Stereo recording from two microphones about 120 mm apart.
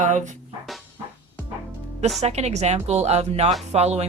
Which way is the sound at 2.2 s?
65° right (ahead or behind).